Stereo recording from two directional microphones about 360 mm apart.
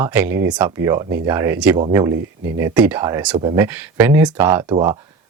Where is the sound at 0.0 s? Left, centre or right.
Centre.